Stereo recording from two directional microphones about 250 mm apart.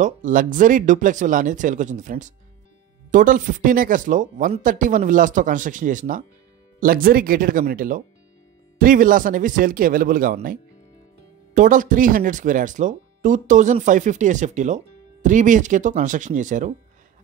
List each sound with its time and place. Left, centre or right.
0.0 s speech: right